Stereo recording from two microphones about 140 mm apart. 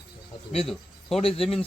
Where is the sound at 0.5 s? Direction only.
Centre (ahead or behind).